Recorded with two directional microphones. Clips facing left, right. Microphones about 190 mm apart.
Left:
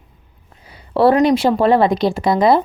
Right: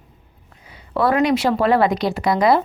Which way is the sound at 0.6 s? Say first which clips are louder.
Left 6 dB; 35° left (ahead or behind).